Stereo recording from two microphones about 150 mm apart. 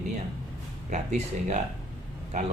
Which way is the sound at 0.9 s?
50° right (ahead or behind).